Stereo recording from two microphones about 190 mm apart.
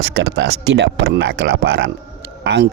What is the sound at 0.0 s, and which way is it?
Speech, 60° right (ahead or behind).